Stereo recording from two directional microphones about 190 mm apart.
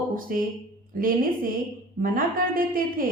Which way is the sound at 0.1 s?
45° right (ahead or behind).